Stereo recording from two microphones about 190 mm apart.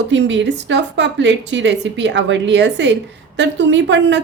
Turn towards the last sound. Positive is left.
turn(degrees=-70)  # may be behind; listen again after turning